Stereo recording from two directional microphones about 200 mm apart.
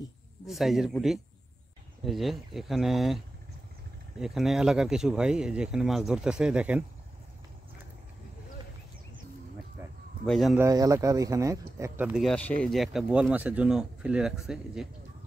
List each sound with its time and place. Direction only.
0.5 s speech: centre (ahead or behind)
4.2 s speech: centre (ahead or behind)
10.2 s speech: centre (ahead or behind)
10.6 s speech: 15° right (ahead or behind)
12.1 s speech: centre (ahead or behind)